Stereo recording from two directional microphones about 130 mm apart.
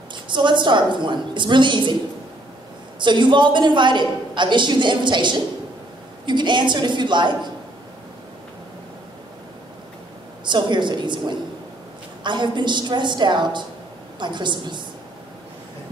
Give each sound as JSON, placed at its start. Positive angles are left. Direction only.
{"t": 0.1, "sound": "a woman's voice", "side_deg": -35}
{"t": 3.0, "sound": "a woman's voice", "side_deg": -35}
{"t": 10.4, "sound": "a woman's voice", "side_deg": -35}